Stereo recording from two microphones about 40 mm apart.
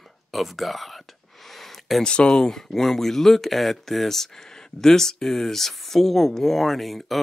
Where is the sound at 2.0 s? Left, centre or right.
Left.